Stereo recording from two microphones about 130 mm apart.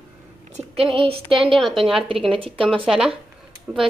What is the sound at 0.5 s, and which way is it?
Speech, 50° right (ahead or behind).